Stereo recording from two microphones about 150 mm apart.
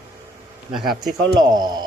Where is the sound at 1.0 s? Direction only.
25° right (ahead or behind).